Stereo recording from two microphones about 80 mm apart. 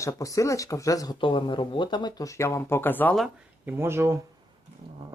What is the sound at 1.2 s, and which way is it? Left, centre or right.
Speech, left.